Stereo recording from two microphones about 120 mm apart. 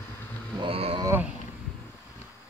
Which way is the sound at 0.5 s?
50° right (ahead or behind).